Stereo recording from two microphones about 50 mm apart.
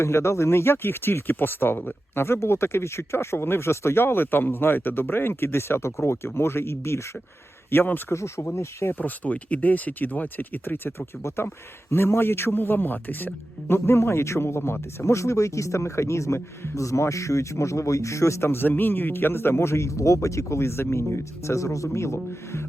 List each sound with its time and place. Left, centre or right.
0.0 s speech: left
2.2 s speech: left
7.7 s speech: left
8.1 s speech: left
8.5 s speech: left
9.0 s speech: left
11.4 s speech: left
21.9 s speech: left